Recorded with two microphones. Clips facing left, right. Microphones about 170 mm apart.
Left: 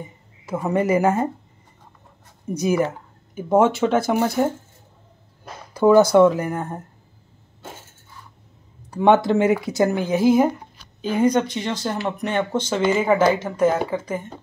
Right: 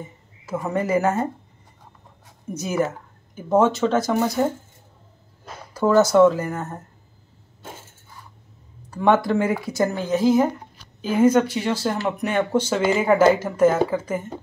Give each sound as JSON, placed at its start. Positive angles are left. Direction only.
{"t": 0.5, "sound": "speech", "side_deg": 15}
{"t": 2.5, "sound": "speech", "side_deg": 15}
{"t": 5.8, "sound": "speech", "side_deg": 15}
{"t": 8.9, "sound": "speech", "side_deg": 20}
{"t": 11.0, "sound": "speech", "side_deg": -5}